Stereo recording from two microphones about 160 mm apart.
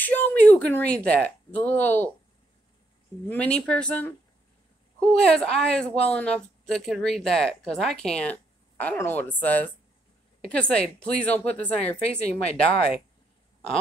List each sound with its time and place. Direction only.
0.0 s speech: 10° left (ahead or behind)
3.3 s speech: 5° left (ahead or behind)